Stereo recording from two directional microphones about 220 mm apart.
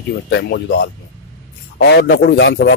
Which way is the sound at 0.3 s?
50° left (ahead or behind).